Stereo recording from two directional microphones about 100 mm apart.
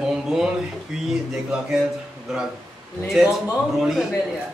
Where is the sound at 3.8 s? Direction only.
5° right (ahead or behind).